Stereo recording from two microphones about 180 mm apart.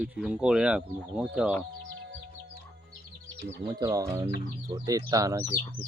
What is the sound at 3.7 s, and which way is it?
Speech, 20° right (ahead or behind).